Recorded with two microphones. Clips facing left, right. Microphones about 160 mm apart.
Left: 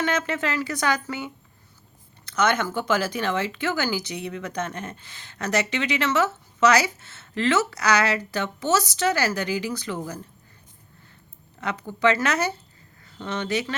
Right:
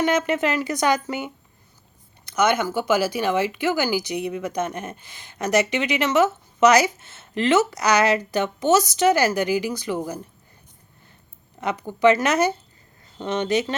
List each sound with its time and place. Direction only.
0.0 s speech: 15° right (ahead or behind)
11.6 s speech: 15° right (ahead or behind)